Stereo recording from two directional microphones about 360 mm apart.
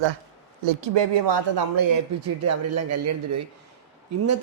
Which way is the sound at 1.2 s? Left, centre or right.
Right.